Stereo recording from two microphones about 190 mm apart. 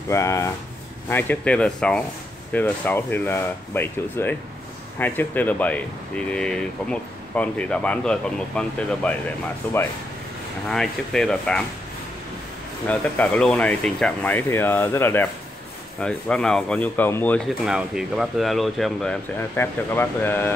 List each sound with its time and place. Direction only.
0.1 s speech: 15° left (ahead or behind)
12.8 s speech: 5° left (ahead or behind)
17.6 s speech: 5° right (ahead or behind)